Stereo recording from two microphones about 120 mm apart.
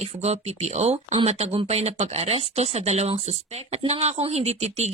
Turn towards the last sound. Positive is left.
turn(degrees=-65)  # may be behind; listen again after turning